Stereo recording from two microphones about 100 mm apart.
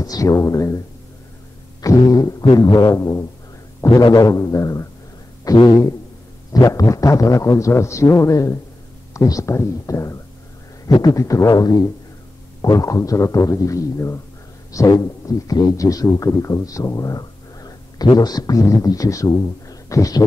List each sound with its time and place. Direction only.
0.0 s a man's voice: 35° left (ahead or behind)